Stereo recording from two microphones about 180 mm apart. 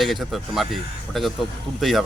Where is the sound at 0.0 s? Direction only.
Centre (ahead or behind).